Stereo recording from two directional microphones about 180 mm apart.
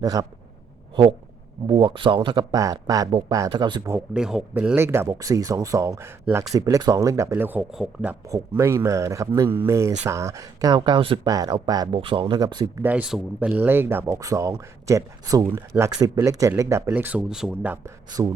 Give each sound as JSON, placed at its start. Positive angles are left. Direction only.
{"t": 0.0, "sound": "speech", "side_deg": -20}
{"t": 1.6, "sound": "speech", "side_deg": -25}
{"t": 8.3, "sound": "speech", "side_deg": -15}
{"t": 12.8, "sound": "speech", "side_deg": -10}